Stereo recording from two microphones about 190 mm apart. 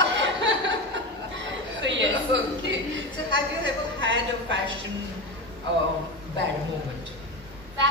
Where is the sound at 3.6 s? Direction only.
75° right (ahead or behind).